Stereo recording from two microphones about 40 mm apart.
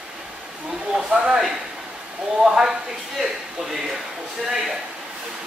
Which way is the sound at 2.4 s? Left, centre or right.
Centre.